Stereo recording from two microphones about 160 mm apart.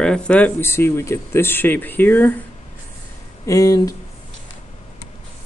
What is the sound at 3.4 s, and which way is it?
Speech, 20° left (ahead or behind).